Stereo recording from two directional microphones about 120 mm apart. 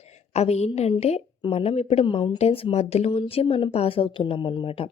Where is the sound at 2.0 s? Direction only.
45° left (ahead or behind).